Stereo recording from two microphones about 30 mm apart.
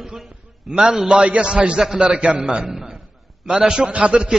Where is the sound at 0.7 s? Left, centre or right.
Centre.